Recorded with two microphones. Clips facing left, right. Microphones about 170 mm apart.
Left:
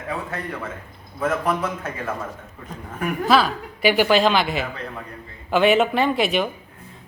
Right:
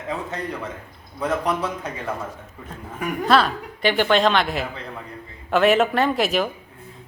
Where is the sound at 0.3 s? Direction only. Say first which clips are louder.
Right 1 dB; 20° right (ahead or behind).